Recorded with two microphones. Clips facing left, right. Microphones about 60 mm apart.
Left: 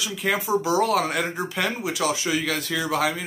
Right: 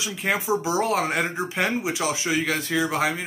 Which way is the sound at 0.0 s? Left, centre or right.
Right.